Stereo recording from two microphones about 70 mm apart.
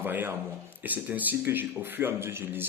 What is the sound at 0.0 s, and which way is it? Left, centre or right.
Speech, right.